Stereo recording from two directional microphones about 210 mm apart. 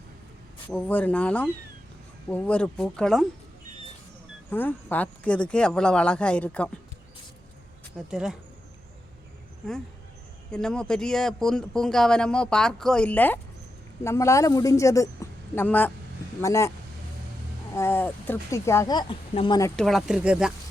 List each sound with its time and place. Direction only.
0.7 s speech: 5° left (ahead or behind)
4.5 s speech: 10° left (ahead or behind)
7.9 s speech: centre (ahead or behind)
10.5 s speech: 5° left (ahead or behind)
17.7 s speech: 10° left (ahead or behind)
19.7 s speech: centre (ahead or behind)